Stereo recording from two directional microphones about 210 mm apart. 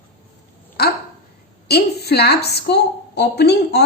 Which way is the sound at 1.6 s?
50° left (ahead or behind).